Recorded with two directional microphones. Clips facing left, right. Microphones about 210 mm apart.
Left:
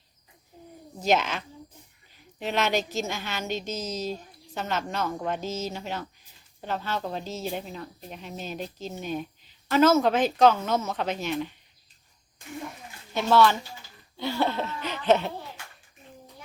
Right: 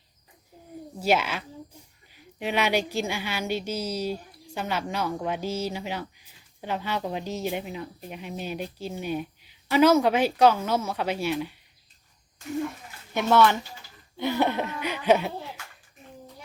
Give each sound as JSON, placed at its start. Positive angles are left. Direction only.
{"t": 0.9, "sound": "a woman's voice", "side_deg": -10}
{"t": 13.1, "sound": "a woman's voice", "side_deg": -15}